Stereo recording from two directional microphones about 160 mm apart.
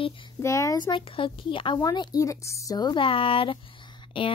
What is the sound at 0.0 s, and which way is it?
Speech, 35° left (ahead or behind).